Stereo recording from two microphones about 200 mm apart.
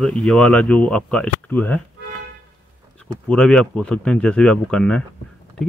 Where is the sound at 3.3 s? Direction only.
5° left (ahead or behind).